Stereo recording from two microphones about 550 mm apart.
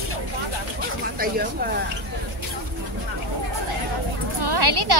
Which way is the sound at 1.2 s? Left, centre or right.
Centre.